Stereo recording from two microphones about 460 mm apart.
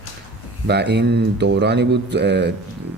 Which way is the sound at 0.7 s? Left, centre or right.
Right.